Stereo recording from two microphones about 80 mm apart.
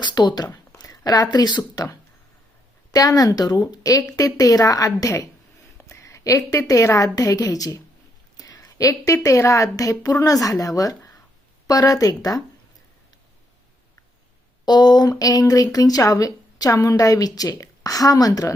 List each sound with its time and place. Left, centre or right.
0.0 s speech: left
0.5 s a woman's voice: left
8.4 s a sound: left
9.2 s a woman's voice: left
14.6 s a woman's voice: left